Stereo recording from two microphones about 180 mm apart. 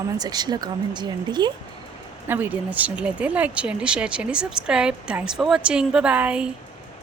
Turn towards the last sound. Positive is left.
turn(degrees=-5)  # may be behind; listen again after turning